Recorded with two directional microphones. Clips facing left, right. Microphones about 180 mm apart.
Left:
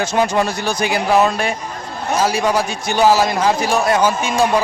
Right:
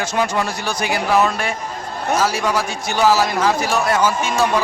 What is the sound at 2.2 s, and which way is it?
A man's voice, 15° left (ahead or behind).